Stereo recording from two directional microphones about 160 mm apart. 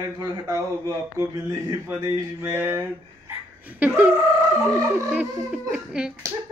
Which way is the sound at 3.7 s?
10° right (ahead or behind).